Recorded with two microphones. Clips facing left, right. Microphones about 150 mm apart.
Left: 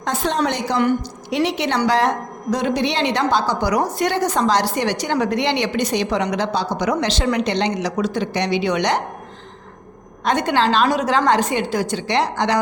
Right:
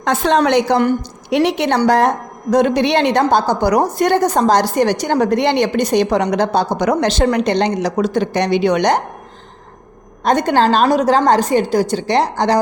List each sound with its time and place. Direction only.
0.0 s a woman's voice: 75° right (ahead or behind)
1.3 s a woman's voice: 60° right (ahead or behind)
10.2 s a woman's voice: 45° right (ahead or behind)